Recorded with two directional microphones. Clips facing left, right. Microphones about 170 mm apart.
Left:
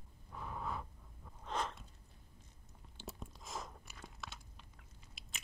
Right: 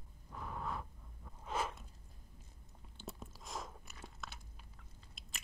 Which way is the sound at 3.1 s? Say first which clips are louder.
Even; centre (ahead or behind).